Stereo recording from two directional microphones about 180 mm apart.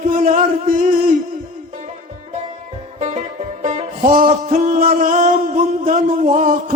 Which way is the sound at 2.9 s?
40° right (ahead or behind).